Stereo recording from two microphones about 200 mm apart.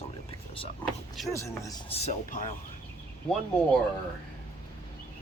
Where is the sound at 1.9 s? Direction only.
35° left (ahead or behind).